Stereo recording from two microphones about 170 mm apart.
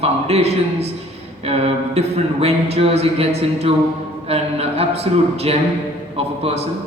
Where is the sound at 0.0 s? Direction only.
35° right (ahead or behind).